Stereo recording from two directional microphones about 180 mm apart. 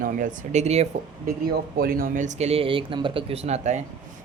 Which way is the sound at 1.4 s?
55° right (ahead or behind).